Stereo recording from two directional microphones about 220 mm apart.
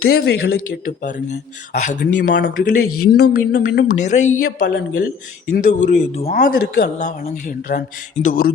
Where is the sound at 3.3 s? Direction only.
45° left (ahead or behind).